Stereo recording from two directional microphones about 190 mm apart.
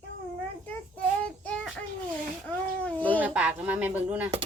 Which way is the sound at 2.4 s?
5° left (ahead or behind).